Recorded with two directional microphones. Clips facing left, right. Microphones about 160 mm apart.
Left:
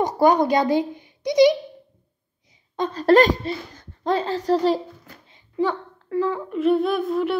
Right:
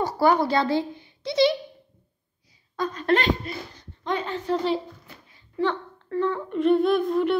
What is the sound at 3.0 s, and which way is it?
A child's voice, 40° left (ahead or behind).